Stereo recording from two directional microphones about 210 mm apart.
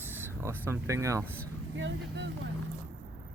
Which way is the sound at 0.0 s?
10° right (ahead or behind).